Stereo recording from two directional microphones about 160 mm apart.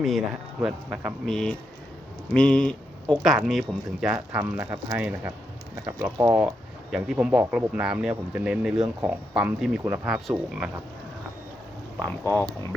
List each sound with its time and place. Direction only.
0.0 s speech: centre (ahead or behind)
5.8 s speech: 20° right (ahead or behind)
6.9 s speech: 5° right (ahead or behind)
10.1 s speech: 5° right (ahead or behind)
12.0 s speech: 15° left (ahead or behind)